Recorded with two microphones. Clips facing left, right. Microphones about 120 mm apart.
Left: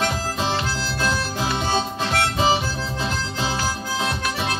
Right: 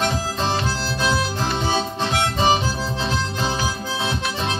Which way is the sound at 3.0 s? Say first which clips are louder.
Right 1 dB; 5° left (ahead or behind).